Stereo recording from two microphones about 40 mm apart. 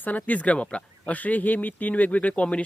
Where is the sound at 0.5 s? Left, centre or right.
Left.